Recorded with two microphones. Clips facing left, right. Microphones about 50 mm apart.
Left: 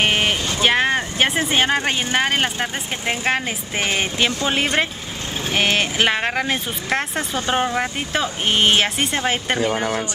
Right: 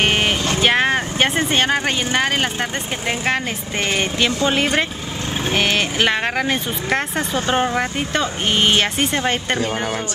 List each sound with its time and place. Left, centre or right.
0.0 s vehicle: centre
0.6 s speech: centre